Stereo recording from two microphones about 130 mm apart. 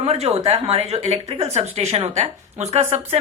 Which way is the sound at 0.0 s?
50° right (ahead or behind).